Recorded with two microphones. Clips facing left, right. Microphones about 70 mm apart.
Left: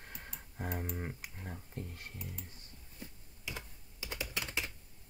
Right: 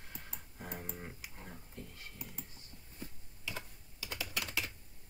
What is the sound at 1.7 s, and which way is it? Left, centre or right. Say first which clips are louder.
Speech: left 4 dB; left.